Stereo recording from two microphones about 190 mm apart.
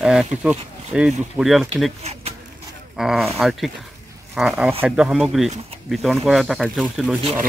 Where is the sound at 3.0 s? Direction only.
Centre (ahead or behind).